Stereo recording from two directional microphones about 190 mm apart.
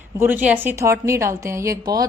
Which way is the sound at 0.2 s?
10° right (ahead or behind).